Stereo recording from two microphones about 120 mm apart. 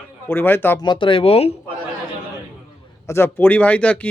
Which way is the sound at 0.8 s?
40° left (ahead or behind).